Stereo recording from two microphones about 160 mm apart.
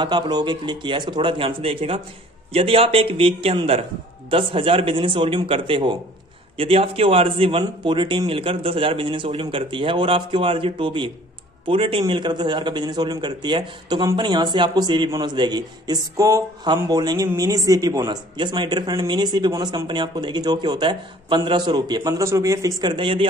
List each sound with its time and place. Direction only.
0.0 s a man's voice: 25° right (ahead or behind)